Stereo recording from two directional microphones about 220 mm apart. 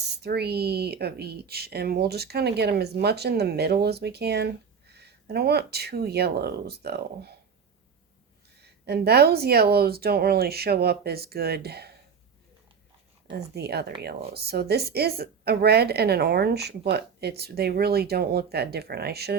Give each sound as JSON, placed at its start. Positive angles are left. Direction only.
{"t": 0.2, "sound": "speech", "side_deg": -45}
{"t": 8.6, "sound": "speech", "side_deg": -45}
{"t": 13.3, "sound": "speech", "side_deg": -45}